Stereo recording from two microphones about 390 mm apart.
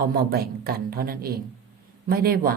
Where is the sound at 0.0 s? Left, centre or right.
Right.